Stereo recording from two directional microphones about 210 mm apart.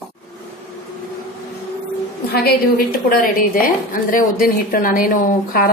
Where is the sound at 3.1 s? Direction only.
40° left (ahead or behind).